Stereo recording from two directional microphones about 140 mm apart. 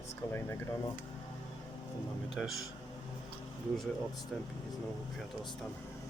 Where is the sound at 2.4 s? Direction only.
Centre (ahead or behind).